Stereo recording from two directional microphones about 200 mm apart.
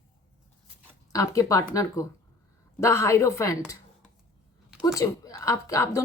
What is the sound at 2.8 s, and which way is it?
Speech, 15° left (ahead or behind).